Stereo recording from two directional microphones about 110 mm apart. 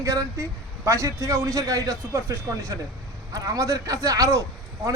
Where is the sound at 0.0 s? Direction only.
30° right (ahead or behind).